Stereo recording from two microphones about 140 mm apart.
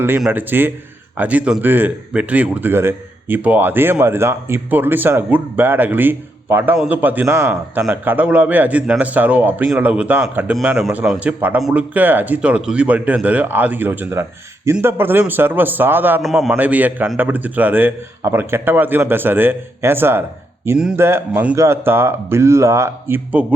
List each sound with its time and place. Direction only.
0.3 s speech: 15° right (ahead or behind)
16.2 s a man's voice: centre (ahead or behind)